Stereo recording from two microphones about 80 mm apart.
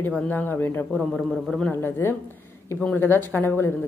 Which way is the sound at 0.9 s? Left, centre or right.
Centre.